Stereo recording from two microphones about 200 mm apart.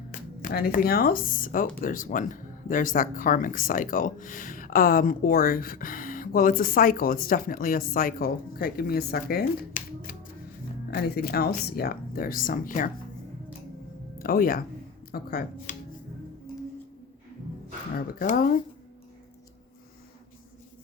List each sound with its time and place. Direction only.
0.4 s speech: 45° left (ahead or behind)
14.2 s speech: 45° left (ahead or behind)
17.9 s speech: 45° left (ahead or behind)